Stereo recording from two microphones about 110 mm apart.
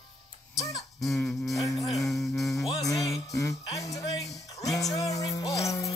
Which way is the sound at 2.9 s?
30° left (ahead or behind).